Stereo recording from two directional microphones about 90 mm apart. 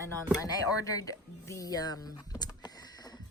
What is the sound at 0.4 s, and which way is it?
Speech, 40° left (ahead or behind).